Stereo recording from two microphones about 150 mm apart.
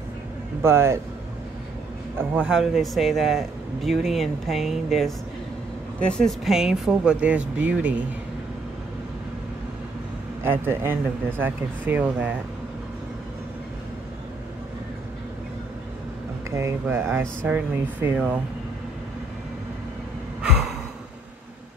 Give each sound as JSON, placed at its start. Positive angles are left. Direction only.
{"t": 0.6, "sound": "speech", "side_deg": -15}
{"t": 2.4, "sound": "speech", "side_deg": -5}
{"t": 10.4, "sound": "speech", "side_deg": -15}
{"t": 16.4, "sound": "speech", "side_deg": -20}